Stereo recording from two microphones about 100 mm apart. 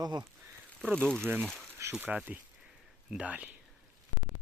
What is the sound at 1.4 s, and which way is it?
Speech, 5° left (ahead or behind).